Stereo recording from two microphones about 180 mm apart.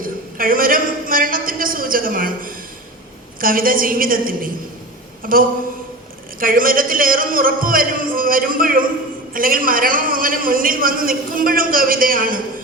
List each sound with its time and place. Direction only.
0.0 s a man's voice: 50° right (ahead or behind)
6.4 s a man's voice: 50° right (ahead or behind)